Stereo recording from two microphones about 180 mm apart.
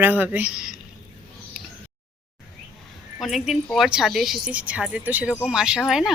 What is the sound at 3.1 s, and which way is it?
A woman's voice, centre (ahead or behind).